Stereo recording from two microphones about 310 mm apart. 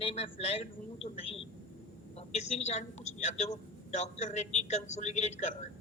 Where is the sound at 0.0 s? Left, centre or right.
Centre.